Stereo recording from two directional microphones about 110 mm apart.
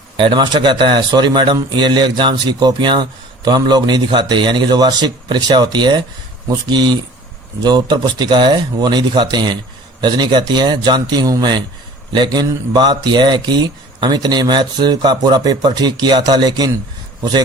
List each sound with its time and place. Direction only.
0.2 s speech: 45° right (ahead or behind)